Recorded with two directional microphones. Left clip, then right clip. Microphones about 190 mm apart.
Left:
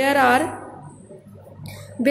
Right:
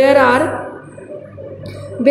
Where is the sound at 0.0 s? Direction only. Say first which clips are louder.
Right 6 dB; 35° left (ahead or behind).